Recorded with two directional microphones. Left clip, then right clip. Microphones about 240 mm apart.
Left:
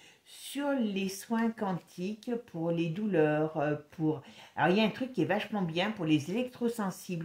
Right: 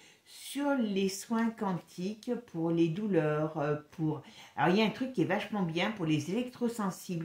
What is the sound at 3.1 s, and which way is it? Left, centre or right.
Mantra, left.